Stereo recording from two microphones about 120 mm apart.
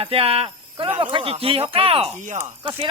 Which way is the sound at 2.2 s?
80° right.